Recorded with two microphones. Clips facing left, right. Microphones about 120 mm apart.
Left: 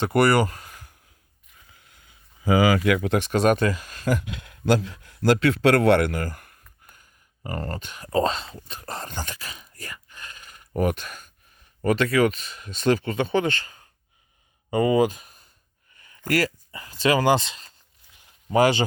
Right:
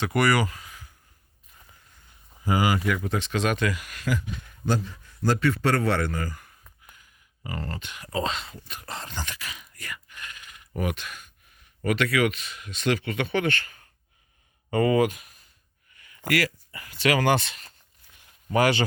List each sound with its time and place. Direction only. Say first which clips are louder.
0.2 s speech: left 4 dB; 30° left (ahead or behind)
0.4 s a sound: left 2 dB; 50° left (ahead or behind)
2.7 s speech: left 5 dB; 90° left
3.2 s speech: left 6 dB; 45° left (ahead or behind); by 4.1 s 30° left (ahead or behind)
4.1 s speech: left 4 dB; 80° left; by 6.5 s 60° left (ahead or behind)
6.9 s speech: even; 45° left (ahead or behind); by 15.0 s 20° left (ahead or behind)
15.0 s a sound: left 2 dB; 30° left (ahead or behind)
16.7 s speech: left 2 dB; 30° left (ahead or behind)